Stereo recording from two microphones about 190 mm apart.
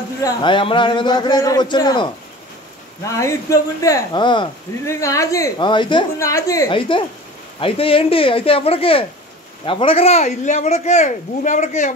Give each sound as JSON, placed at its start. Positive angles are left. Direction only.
{"t": 0.2, "sound": "a man's voice", "side_deg": 25}
{"t": 3.2, "sound": "a man's voice", "side_deg": 15}